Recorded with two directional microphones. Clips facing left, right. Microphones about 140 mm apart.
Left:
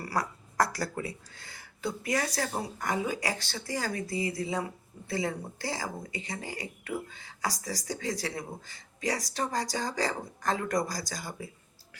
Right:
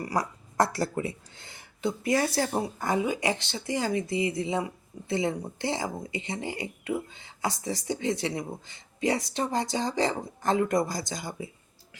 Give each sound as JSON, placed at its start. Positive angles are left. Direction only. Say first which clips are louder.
{"t": 0.0, "sound": "speech", "louder": "right 3 dB", "side_deg": -20}